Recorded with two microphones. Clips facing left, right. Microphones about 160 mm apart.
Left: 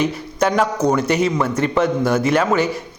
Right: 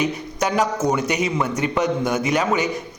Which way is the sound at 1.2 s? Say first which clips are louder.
Left 4 dB; 15° right (ahead or behind).